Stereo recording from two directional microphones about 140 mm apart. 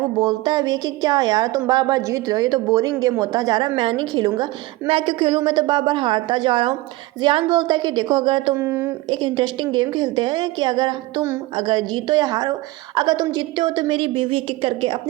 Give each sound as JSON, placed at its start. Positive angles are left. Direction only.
{"t": 0.2, "sound": "a woman's voice", "side_deg": -30}
{"t": 8.5, "sound": "speech", "side_deg": -15}
{"t": 9.0, "sound": "a woman's voice", "side_deg": -35}